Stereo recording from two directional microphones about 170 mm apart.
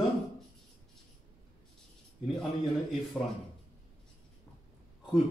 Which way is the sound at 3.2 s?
5° left (ahead or behind).